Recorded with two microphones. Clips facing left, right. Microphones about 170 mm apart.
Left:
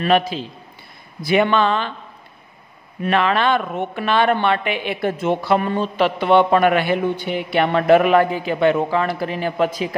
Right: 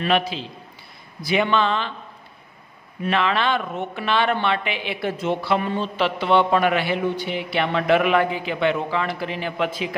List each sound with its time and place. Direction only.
0.0 s speech: 45° left (ahead or behind)
3.0 s speech: 50° left (ahead or behind)